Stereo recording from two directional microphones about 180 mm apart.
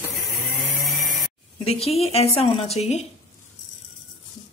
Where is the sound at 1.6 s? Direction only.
35° left (ahead or behind).